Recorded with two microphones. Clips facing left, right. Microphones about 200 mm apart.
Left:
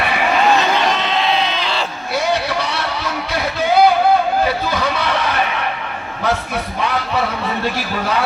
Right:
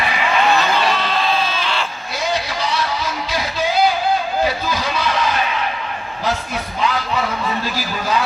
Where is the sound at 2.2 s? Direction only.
60° left (ahead or behind).